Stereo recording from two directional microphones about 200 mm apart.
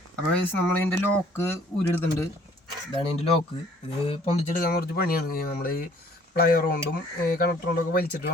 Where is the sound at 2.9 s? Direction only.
30° left (ahead or behind).